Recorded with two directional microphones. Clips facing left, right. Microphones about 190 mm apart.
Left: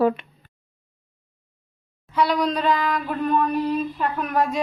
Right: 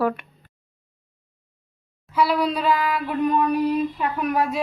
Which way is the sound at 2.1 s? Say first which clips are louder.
Even; 5° right (ahead or behind).